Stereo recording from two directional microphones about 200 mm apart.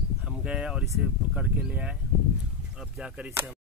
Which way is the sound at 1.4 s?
5° right (ahead or behind).